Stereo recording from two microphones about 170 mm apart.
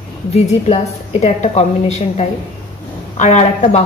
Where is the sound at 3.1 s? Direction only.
40° left (ahead or behind).